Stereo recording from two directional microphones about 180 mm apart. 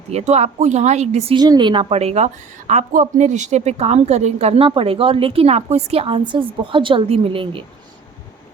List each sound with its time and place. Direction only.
0.1 s a woman's voice: 35° right (ahead or behind)
1.4 s a woman's voice: 25° right (ahead or behind)